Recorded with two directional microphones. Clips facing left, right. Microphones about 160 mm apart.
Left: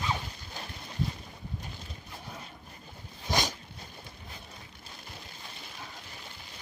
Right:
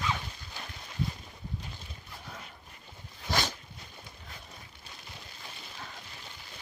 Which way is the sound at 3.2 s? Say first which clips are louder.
Left 1 dB; 15° left (ahead or behind).